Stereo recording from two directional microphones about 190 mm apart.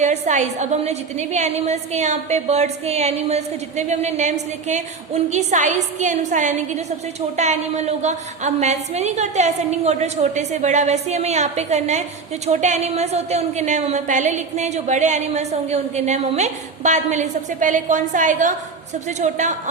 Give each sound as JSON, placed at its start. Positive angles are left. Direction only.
{"t": 0.0, "sound": "a woman's voice", "side_deg": -40}